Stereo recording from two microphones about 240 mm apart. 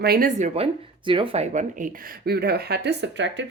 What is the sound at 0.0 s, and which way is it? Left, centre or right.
Speech, right.